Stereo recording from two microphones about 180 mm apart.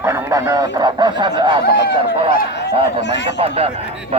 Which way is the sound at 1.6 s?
70° left (ahead or behind).